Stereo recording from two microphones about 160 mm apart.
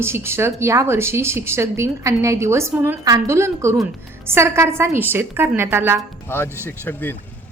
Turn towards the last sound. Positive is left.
turn(degrees=10)  # may be behind; listen again after turning